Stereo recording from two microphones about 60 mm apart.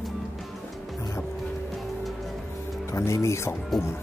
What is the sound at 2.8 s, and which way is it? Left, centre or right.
Speech, left.